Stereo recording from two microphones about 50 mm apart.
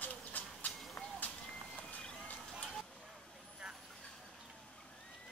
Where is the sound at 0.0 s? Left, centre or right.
Left.